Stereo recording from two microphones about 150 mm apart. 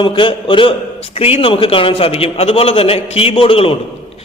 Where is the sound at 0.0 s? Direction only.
35° left (ahead or behind).